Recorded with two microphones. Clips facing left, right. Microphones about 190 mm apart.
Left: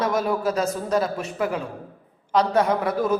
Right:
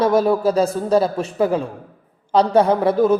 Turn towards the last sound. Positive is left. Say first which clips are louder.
# right 7 dB
turn(degrees=-30)  # may be behind; listen again after turning